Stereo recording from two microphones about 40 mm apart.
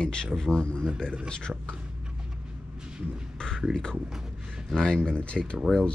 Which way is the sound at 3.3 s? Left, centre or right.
Centre.